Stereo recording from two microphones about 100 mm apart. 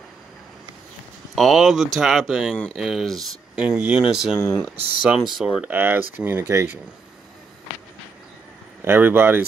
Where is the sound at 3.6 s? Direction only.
15° right (ahead or behind).